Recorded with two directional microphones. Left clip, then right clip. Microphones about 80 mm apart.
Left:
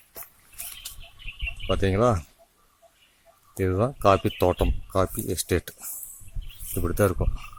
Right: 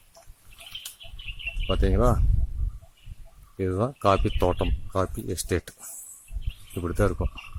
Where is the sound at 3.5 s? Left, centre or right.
Centre.